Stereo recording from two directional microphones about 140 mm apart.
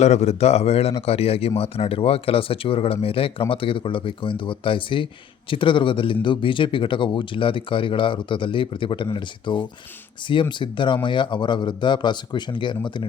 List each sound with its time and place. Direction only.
0.0 s a man's voice: 50° left (ahead or behind); by 13.1 s 35° left (ahead or behind)